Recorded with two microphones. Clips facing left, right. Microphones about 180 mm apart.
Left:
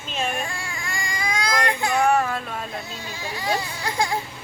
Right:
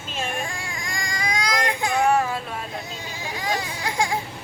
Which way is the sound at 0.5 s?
15° right (ahead or behind).